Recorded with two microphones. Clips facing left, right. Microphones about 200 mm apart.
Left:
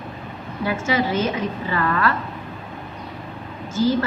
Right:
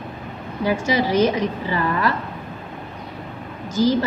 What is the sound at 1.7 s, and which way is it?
Speech, 15° right (ahead or behind).